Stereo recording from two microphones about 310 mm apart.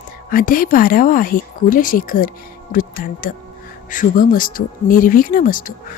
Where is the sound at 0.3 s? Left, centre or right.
Left.